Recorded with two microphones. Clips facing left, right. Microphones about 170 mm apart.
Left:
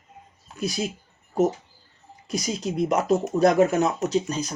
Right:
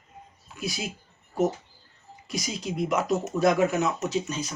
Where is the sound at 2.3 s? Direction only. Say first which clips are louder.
Left 4 dB; 35° left (ahead or behind).